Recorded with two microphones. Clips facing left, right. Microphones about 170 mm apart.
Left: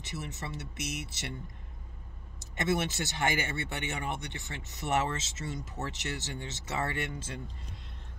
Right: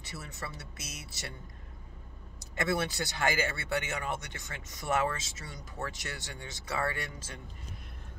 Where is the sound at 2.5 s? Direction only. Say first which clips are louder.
Left 1 dB; 20° left (ahead or behind).